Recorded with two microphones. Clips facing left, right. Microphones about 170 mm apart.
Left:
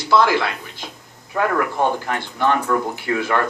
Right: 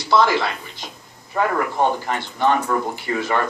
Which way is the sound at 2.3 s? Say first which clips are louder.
Even; 55° left (ahead or behind).